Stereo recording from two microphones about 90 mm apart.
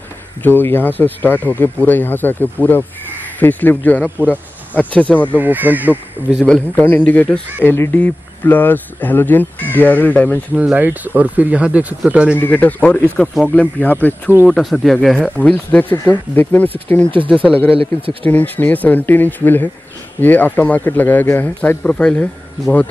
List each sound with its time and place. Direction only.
0.4 s speech: 20° left (ahead or behind)
5.4 s speech: 20° right (ahead or behind)
6.4 s speech: 15° left (ahead or behind)
7.6 s speech: 25° left (ahead or behind)
10.5 s speech: 15° right (ahead or behind)
12.4 s speech: 20° left (ahead or behind)
14.5 s speech: centre (ahead or behind)
15.5 s speech: 20° left (ahead or behind)
18.2 s speech: 20° left (ahead or behind)